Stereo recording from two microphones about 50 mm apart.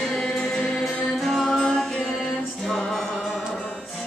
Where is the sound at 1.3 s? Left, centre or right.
Centre.